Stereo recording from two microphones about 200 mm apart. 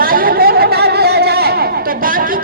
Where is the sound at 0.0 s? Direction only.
45° right (ahead or behind).